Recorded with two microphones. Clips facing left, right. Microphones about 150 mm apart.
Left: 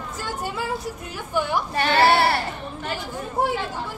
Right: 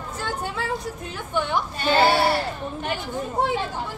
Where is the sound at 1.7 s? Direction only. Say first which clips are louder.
Left 1 dB; 65° left (ahead or behind).